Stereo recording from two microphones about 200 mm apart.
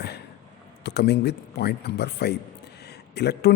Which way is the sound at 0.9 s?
55° left (ahead or behind).